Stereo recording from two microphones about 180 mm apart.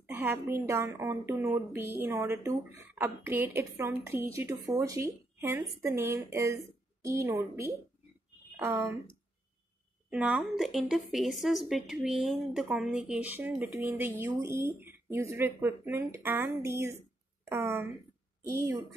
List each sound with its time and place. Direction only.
0.0 s a woman's voice: 10° right (ahead or behind)
10.0 s a woman's voice: 5° right (ahead or behind)